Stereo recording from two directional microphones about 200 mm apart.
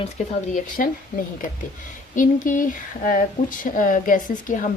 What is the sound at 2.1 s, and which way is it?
A woman's voice, 40° left (ahead or behind).